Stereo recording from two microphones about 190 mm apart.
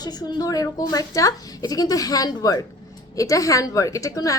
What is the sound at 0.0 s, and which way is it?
A woman's voice, 20° left (ahead or behind).